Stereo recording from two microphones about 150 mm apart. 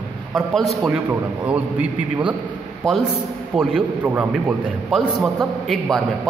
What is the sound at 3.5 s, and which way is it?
A man's voice, 5° right (ahead or behind).